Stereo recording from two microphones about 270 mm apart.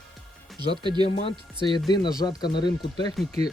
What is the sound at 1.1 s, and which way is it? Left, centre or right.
Speech, left.